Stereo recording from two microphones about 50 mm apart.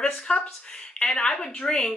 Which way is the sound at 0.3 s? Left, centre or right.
Centre.